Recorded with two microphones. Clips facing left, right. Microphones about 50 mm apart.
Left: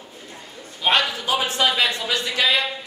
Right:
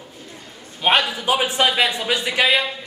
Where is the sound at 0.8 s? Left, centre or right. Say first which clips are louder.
Right 2 dB; right.